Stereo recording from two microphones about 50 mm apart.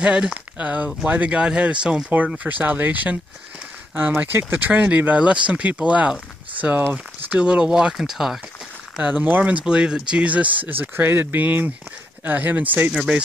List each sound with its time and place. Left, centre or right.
0.0 s speech: centre
7.2 s speech: right
8.0 s speech: centre
9.0 s speech: right
10.2 s speech: right
10.7 s speech: right